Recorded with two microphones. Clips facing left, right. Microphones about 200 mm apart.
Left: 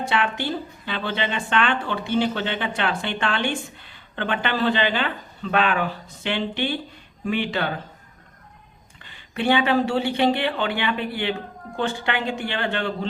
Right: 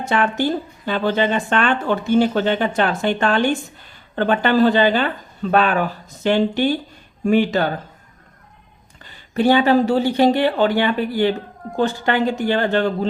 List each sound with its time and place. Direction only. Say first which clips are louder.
0.0 s speech: right 5 dB; 45° right (ahead or behind)
9.0 s speech: right 6 dB; 40° right (ahead or behind)